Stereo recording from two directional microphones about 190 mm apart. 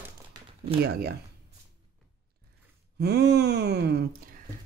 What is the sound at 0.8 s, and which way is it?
Groan, 55° right (ahead or behind).